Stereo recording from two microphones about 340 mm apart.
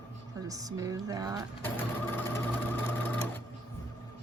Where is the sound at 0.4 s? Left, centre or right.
Centre.